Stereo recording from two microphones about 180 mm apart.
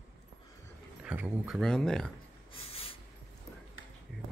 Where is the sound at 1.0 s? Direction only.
10° right (ahead or behind).